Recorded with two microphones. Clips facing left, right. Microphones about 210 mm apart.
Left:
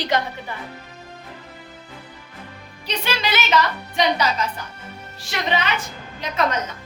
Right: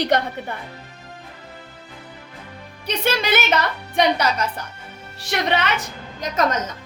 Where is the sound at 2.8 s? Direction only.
55° right (ahead or behind).